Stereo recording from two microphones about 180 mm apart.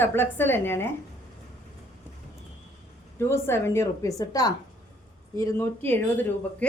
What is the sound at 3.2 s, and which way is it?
A woman's voice, 15° left (ahead or behind).